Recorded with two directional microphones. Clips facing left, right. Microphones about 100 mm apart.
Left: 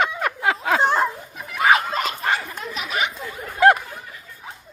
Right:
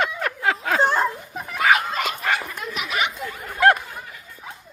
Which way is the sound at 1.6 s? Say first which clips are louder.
Left 2 dB; 30° left (ahead or behind).